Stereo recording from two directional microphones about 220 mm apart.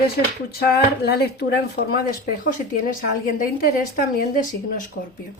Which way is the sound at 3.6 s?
40° left (ahead or behind).